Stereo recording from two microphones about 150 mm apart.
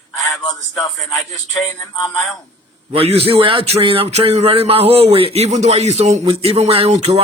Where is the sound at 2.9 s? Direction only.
40° right (ahead or behind).